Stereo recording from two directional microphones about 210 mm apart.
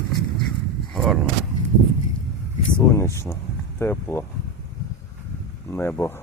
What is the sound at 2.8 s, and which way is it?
Speech, 15° left (ahead or behind).